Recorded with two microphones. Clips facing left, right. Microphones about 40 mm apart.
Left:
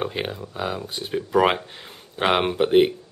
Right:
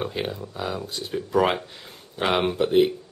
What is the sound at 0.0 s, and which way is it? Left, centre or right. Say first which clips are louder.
Speech: left 1 dB; centre.